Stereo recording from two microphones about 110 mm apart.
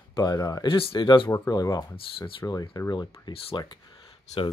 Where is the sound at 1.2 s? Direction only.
30° left (ahead or behind).